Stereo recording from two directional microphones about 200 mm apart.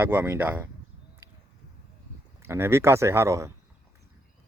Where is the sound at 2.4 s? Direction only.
10° right (ahead or behind).